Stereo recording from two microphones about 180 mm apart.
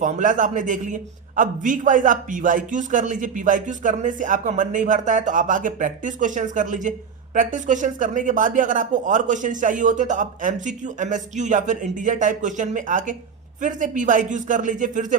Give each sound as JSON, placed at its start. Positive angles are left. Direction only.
{"t": 0.0, "sound": "a man's voice", "side_deg": -45}